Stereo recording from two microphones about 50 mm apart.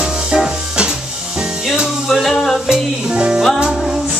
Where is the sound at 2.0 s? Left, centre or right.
Centre.